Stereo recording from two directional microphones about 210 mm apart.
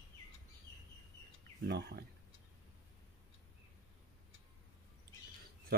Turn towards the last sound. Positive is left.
turn(degrees=-45)  # may be behind; listen again after turning